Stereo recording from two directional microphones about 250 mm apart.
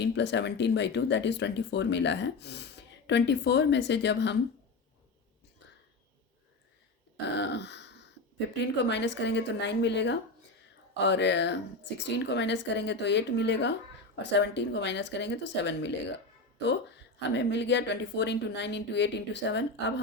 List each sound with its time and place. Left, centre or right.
0.0 s speech: left
7.3 s throat clearing: left
8.5 s speech: left
17.2 s speech: left